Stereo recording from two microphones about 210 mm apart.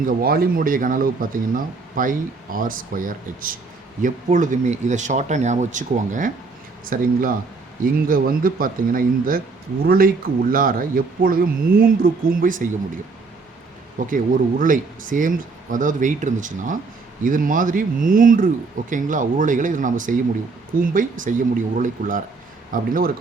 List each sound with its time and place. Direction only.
0.0 s speech: 45° right (ahead or behind)
14.0 s speech: 40° right (ahead or behind)